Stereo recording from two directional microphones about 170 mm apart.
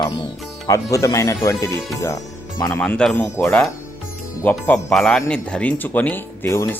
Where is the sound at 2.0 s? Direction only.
20° left (ahead or behind).